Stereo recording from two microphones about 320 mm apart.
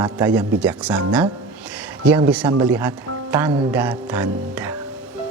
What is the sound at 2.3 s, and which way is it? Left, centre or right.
Speech, centre.